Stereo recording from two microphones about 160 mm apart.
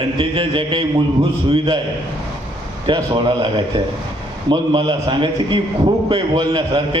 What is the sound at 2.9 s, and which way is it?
Speech, 30° right (ahead or behind).